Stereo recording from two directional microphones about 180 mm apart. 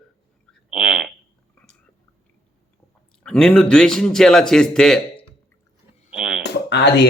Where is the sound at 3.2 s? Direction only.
5° left (ahead or behind).